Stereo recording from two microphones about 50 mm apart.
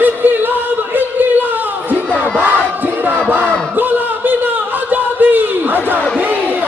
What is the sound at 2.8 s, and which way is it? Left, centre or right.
Crowd, right.